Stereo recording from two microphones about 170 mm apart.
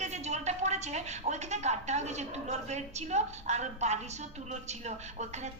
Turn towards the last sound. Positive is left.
turn(degrees=-45)  # may be behind; listen again after turning